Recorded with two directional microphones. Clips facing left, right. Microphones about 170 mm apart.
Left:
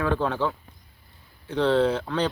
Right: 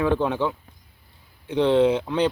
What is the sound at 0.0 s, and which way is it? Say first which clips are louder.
Speech: right 3 dB; 15° right (ahead or behind).